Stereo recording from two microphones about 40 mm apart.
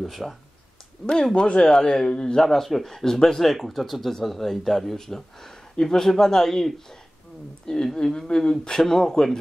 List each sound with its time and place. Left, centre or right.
0.0 s speech: centre
1.3 s speech: left
2.4 s speech: centre